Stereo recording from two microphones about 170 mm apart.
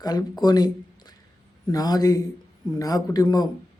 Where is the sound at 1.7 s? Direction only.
20° left (ahead or behind).